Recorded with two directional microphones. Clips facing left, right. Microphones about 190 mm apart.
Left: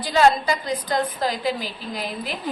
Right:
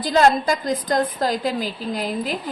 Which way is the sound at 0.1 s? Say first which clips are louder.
Right 1 dB; 45° right (ahead or behind).